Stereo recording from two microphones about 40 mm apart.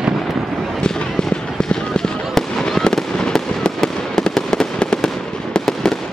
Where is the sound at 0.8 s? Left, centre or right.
Centre.